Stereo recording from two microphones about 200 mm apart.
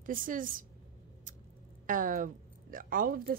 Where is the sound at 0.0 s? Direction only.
45° right (ahead or behind).